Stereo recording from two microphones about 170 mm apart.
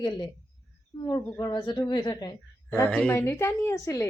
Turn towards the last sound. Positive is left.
turn(degrees=15)  # may be behind; listen again after turning